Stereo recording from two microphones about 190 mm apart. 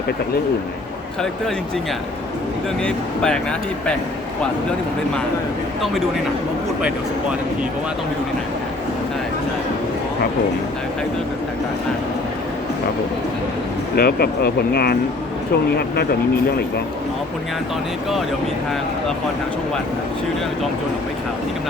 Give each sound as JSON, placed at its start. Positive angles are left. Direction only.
{"t": 2.8, "sound": "speech", "side_deg": 5}
{"t": 13.9, "sound": "speech", "side_deg": 55}